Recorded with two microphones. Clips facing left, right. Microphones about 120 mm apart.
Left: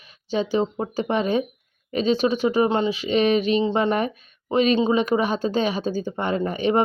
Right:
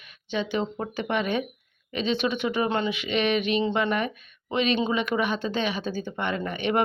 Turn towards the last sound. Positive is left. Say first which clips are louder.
# left 5 dB
turn(degrees=35)  # may be behind; listen again after turning